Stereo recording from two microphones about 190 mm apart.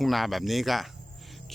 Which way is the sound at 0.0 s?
Centre (ahead or behind).